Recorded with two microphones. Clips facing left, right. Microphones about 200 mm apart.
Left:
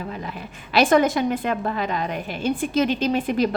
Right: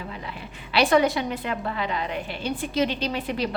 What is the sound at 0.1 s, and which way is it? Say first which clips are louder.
A woman's voice: left 4 dB; 45° left (ahead or behind).